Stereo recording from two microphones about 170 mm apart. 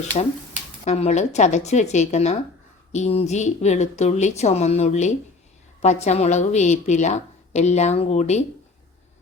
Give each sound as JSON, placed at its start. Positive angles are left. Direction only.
{"t": 0.2, "sound": "a woman's voice", "side_deg": 40}